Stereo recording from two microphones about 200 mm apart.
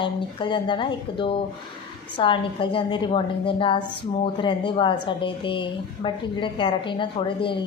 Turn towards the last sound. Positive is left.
turn(degrees=25)  # may be behind; listen again after turning